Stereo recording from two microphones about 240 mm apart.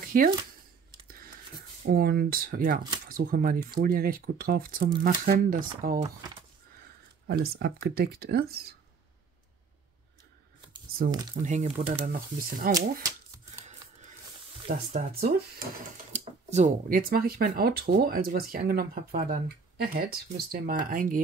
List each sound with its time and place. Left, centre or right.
0.1 s speech: right
1.0 s a sound: right
1.9 s speech: right
7.2 s speech: right
11.4 s speech: right
12.4 s speech: right
14.7 s speech: right